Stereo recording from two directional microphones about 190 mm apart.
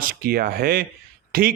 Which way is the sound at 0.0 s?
50° right (ahead or behind).